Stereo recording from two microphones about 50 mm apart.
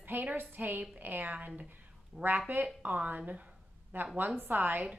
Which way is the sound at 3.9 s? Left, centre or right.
Right.